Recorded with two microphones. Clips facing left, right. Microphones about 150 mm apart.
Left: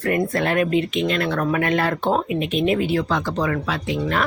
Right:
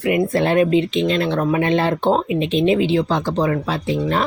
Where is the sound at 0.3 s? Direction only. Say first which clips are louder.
Right 6 dB; 25° right (ahead or behind).